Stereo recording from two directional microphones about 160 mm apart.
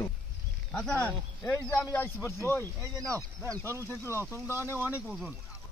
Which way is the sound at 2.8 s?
20° right (ahead or behind).